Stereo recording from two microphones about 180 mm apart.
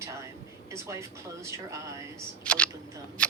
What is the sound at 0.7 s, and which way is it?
Speech, 15° right (ahead or behind).